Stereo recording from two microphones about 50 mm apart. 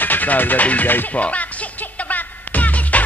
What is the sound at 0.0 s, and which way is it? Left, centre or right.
Speech, left.